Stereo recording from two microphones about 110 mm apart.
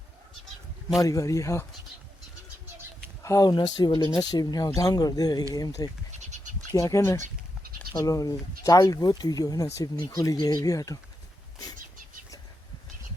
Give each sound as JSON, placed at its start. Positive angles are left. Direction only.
{"t": 1.0, "sound": "speech", "side_deg": 30}
{"t": 3.2, "sound": "speech", "side_deg": 35}